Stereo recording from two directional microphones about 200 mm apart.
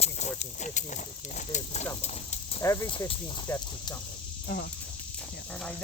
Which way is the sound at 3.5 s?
10° left (ahead or behind).